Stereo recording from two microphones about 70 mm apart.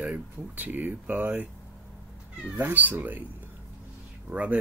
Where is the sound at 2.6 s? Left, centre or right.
Right.